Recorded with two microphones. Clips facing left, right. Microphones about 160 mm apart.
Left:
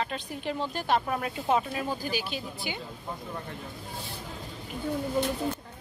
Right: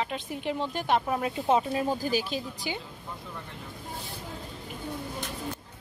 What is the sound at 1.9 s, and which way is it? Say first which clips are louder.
Speech: right 4 dB; 40° right (ahead or behind).